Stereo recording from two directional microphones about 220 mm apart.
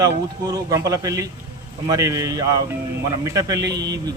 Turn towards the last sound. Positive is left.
turn(degrees=-15)  # may be behind; listen again after turning